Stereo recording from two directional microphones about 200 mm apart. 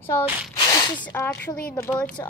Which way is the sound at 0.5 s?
20° left (ahead or behind).